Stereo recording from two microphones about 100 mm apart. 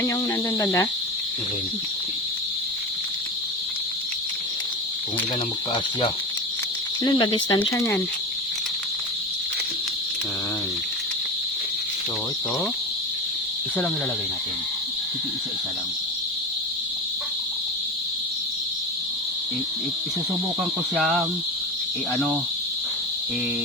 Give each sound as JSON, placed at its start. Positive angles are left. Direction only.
{"t": 0.6, "sound": "speech", "side_deg": 35}
{"t": 7.0, "sound": "speech", "side_deg": 50}